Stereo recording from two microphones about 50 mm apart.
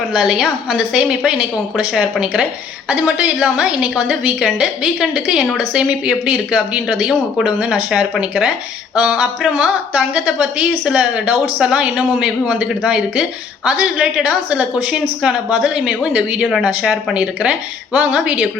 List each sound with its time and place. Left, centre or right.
0.1 s a woman's voice: centre